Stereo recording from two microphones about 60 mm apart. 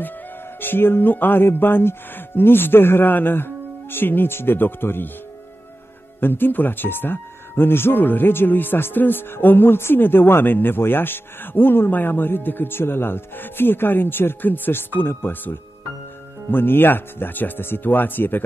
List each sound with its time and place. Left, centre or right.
0.6 s speech: left
6.2 s speech: left